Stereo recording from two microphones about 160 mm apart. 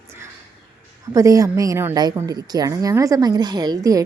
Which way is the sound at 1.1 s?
20° right (ahead or behind).